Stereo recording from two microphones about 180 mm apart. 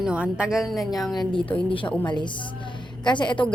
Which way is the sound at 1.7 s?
30° left (ahead or behind).